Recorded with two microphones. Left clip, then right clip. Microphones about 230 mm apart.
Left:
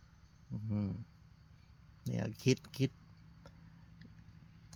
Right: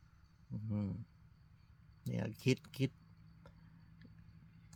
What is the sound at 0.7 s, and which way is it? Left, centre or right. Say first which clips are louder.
Speech: left 2 dB; centre.